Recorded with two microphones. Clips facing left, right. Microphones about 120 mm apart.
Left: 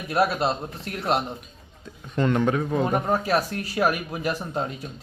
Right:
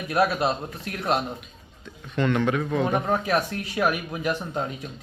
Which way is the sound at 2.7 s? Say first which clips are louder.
Even; 35° left (ahead or behind).